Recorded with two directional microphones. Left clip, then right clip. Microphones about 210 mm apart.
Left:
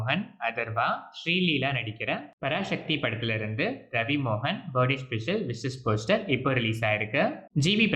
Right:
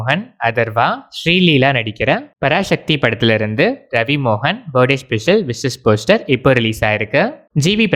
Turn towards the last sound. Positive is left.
turn(degrees=-40)  # may be behind; listen again after turning